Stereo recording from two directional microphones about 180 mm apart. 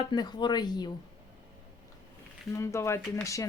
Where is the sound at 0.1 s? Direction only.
25° left (ahead or behind).